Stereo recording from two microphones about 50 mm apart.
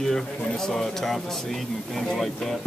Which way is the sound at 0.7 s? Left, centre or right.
Centre.